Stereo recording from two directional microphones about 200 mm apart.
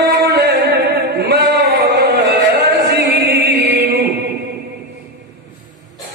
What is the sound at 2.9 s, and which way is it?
Music, 50° right (ahead or behind).